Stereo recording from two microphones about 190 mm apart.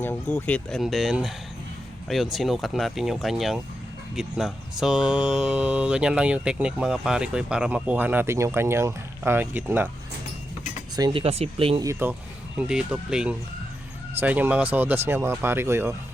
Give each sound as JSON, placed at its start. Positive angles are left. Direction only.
{"t": 0.0, "sound": "speech", "side_deg": 10}
{"t": 10.9, "sound": "speech", "side_deg": -25}
{"t": 11.8, "sound": "speech", "side_deg": -15}